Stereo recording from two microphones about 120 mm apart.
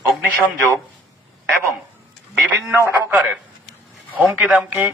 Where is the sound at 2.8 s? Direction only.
20° right (ahead or behind).